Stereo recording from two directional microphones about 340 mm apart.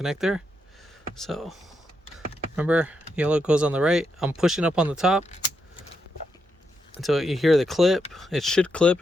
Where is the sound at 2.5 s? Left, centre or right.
Centre.